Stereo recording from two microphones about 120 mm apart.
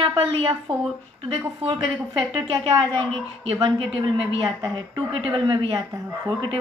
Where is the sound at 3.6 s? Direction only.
45° right (ahead or behind).